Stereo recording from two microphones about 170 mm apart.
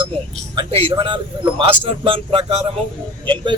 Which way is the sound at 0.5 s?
30° right (ahead or behind).